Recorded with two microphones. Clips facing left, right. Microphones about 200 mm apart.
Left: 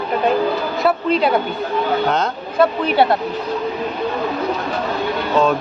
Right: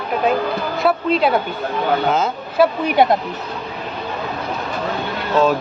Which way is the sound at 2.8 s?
15° right (ahead or behind).